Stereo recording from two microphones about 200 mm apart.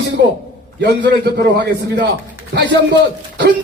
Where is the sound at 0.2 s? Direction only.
60° right (ahead or behind).